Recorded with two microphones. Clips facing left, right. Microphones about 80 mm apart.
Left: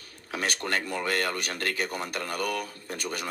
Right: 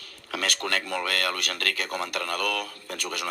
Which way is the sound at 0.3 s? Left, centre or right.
Left.